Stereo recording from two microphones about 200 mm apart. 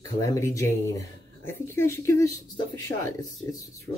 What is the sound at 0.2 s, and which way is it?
Speech, 15° left (ahead or behind).